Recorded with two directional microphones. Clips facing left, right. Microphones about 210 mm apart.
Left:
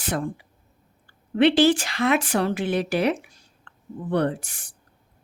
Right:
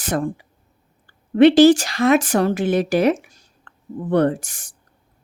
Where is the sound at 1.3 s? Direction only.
45° right (ahead or behind).